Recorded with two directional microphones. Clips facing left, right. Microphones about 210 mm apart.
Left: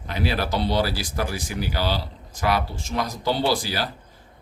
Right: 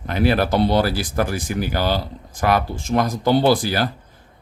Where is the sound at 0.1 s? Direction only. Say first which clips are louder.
Right 7 dB; 55° right (ahead or behind).